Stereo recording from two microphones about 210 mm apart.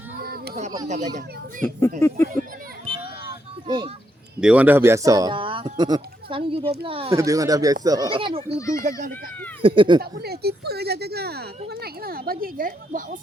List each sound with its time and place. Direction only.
0.2 s a sound: 45° right (ahead or behind)
0.9 s a child's voice: 35° right (ahead or behind)
2.0 s speech: 15° left (ahead or behind)
3.7 s speech: 20° right (ahead or behind)
4.4 s speech: 5° right (ahead or behind); by 7.2 s 25° right (ahead or behind)
7.2 s speech: 15° right (ahead or behind)
8.8 s a child's voice: 40° right (ahead or behind)
9.6 s speech: 25° right (ahead or behind)
10.0 s speech: 50° right (ahead or behind)